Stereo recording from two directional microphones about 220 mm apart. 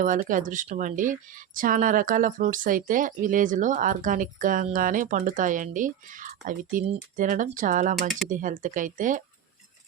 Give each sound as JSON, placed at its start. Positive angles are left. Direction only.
{"t": 0.0, "sound": "speech", "side_deg": -35}